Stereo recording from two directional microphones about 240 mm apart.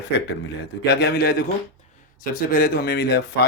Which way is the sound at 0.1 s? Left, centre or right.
Left.